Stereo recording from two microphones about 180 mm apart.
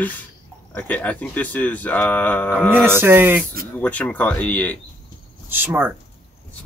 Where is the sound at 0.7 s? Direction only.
10° left (ahead or behind).